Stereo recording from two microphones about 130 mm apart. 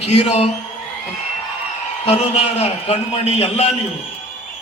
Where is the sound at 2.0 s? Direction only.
55° left (ahead or behind).